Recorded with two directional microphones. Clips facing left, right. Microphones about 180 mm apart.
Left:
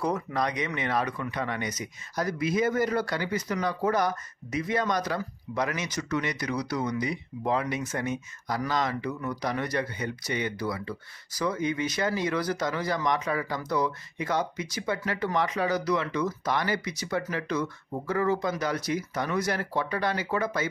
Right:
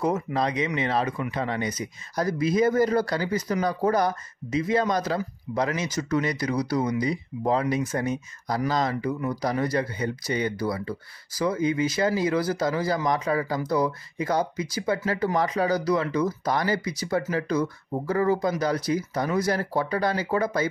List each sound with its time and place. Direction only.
0.0 s speech: 25° right (ahead or behind)